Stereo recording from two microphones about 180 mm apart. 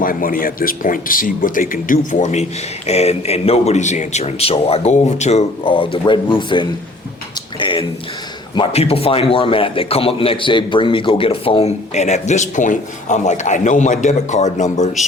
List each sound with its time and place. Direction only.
0.0 s a man's voice: 50° left (ahead or behind)
5.6 s a man's voice: 30° left (ahead or behind)